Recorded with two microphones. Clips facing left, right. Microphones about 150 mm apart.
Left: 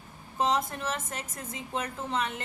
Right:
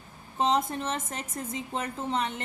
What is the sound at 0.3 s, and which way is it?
A woman's voice, 25° right (ahead or behind).